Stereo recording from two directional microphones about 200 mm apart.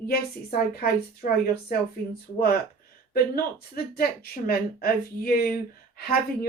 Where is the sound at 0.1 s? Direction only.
50° left (ahead or behind).